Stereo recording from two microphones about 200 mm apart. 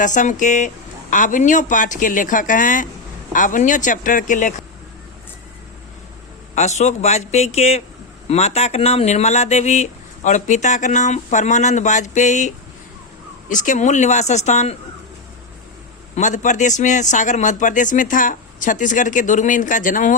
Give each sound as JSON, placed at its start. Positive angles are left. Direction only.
{"t": 0.0, "sound": "speech", "side_deg": 40}
{"t": 6.6, "sound": "speech", "side_deg": 35}
{"t": 13.5, "sound": "speech", "side_deg": 40}
{"t": 16.1, "sound": "speech", "side_deg": 40}